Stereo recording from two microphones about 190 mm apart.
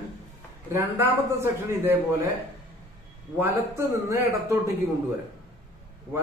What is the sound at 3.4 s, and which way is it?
A man's voice, 15° right (ahead or behind).